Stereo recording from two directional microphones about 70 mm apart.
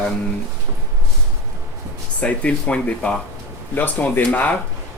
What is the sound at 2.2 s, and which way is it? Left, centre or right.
Speech, centre.